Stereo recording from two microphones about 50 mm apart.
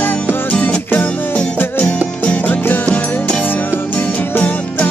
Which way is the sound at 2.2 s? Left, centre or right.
Left.